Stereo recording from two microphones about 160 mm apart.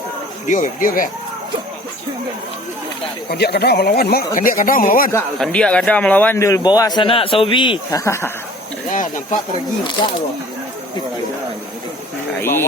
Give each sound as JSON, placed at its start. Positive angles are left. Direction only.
{"t": 0.4, "sound": "speech", "side_deg": 50}
{"t": 3.2, "sound": "speech", "side_deg": 90}
{"t": 5.4, "sound": "a man's voice", "side_deg": 5}
{"t": 7.9, "sound": "speech", "side_deg": 20}
{"t": 8.9, "sound": "a sound", "side_deg": 50}
{"t": 12.4, "sound": "speech", "side_deg": 15}